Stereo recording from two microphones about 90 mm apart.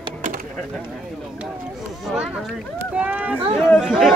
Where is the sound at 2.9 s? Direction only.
20° right (ahead or behind).